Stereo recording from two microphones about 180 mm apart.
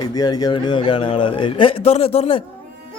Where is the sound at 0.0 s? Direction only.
20° left (ahead or behind).